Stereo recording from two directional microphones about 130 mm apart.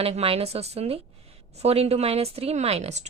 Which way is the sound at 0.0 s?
50° right (ahead or behind).